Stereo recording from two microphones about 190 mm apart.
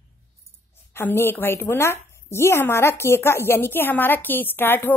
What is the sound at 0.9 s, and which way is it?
Speech, 10° left (ahead or behind).